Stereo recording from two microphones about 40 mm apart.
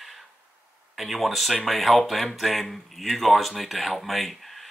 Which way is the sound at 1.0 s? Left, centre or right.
Centre.